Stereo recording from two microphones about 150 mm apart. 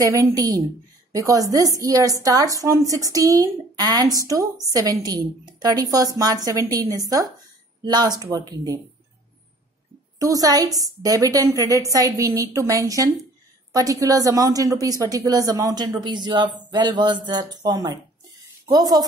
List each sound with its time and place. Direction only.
0.0 s a woman's voice: 20° right (ahead or behind)
10.1 s a woman's voice: 25° right (ahead or behind)